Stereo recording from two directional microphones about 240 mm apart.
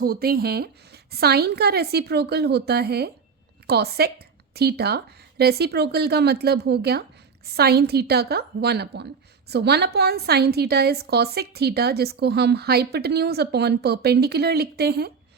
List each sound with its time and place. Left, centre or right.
0.0 s a woman's voice: right